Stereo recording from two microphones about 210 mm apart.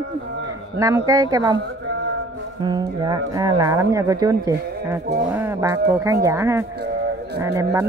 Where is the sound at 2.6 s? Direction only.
20° right (ahead or behind).